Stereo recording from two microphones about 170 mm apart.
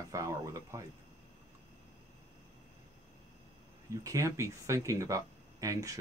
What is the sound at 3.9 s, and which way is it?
Speech, 20° right (ahead or behind).